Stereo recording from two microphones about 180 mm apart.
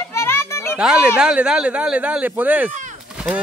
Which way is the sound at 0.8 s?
5° right (ahead or behind).